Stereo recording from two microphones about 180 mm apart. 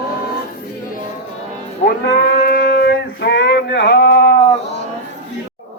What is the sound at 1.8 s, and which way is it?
Livestock, 55° left (ahead or behind).